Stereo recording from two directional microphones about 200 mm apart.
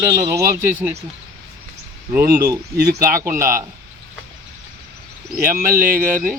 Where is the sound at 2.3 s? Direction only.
50° right (ahead or behind).